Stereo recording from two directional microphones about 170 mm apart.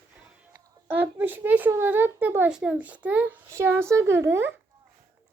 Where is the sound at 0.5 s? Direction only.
10° right (ahead or behind).